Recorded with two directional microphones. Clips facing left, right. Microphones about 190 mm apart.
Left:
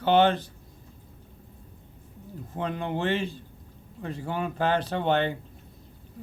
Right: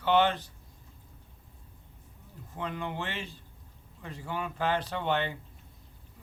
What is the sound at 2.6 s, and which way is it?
Speech, 35° left (ahead or behind).